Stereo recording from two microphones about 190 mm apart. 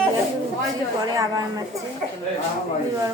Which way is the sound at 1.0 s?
20° right (ahead or behind).